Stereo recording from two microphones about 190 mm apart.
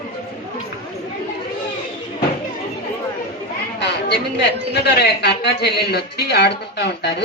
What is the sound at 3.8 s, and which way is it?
A woman's voice, 60° left (ahead or behind).